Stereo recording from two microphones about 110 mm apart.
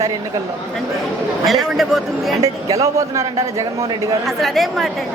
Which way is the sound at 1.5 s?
Centre (ahead or behind).